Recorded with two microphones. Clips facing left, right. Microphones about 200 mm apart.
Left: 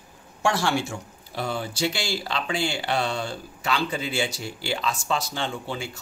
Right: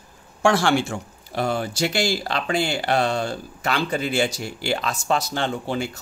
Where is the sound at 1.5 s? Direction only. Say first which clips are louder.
Right 4 dB; 45° right (ahead or behind).